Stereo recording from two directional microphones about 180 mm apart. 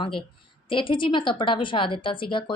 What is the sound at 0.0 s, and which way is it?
A woman's voice, 25° left (ahead or behind).